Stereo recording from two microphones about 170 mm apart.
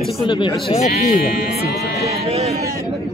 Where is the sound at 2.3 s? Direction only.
35° right (ahead or behind).